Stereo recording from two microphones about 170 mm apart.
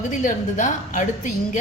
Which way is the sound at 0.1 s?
50° left (ahead or behind).